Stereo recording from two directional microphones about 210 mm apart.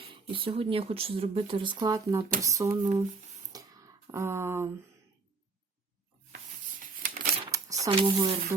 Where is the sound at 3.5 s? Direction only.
15° right (ahead or behind).